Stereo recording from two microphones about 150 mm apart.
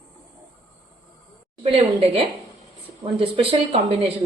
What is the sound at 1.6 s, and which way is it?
Speech, 40° right (ahead or behind).